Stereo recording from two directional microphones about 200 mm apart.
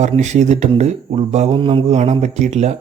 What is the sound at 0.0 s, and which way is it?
Speech, 35° right (ahead or behind).